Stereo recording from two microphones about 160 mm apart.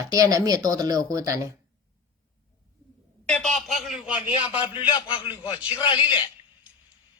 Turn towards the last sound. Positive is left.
turn(degrees=30)  # may be behind; listen again after turning